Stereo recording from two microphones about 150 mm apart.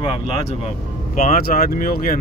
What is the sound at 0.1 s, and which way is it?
Speech, 45° left (ahead or behind).